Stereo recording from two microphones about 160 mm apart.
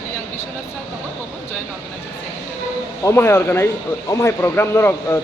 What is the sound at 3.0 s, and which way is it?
Speech, 15° left (ahead or behind).